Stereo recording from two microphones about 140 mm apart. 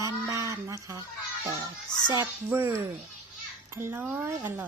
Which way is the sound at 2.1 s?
15° right (ahead or behind).